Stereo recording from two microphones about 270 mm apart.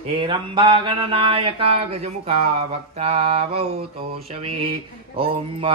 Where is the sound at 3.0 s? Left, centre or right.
Right.